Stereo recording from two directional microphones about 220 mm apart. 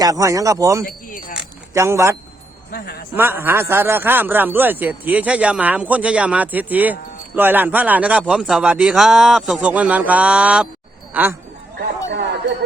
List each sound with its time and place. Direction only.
0.0 s a man's voice: 15° right (ahead or behind)
3.2 s a man's voice: 10° right (ahead or behind)